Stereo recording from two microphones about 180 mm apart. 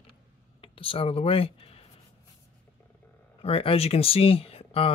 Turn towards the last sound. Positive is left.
turn(degrees=30)  # may be behind; listen again after turning